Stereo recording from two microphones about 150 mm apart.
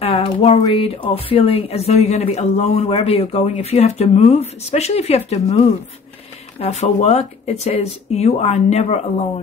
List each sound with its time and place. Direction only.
0.0 s speech: 40° left (ahead or behind)